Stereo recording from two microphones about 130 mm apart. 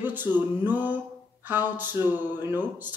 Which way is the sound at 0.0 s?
15° right (ahead or behind).